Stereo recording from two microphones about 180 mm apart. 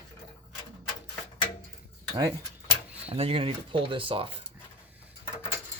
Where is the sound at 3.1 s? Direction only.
35° right (ahead or behind).